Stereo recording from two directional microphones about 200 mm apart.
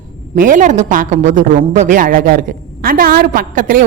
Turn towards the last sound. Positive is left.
turn(degrees=-45)  # may be behind; listen again after turning